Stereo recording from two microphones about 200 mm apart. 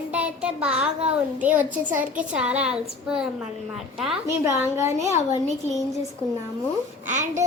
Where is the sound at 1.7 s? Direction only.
40° right (ahead or behind).